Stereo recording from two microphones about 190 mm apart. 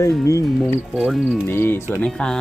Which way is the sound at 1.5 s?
10° left (ahead or behind).